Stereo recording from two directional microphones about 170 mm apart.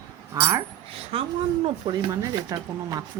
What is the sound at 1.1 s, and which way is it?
A woman's voice, 35° right (ahead or behind).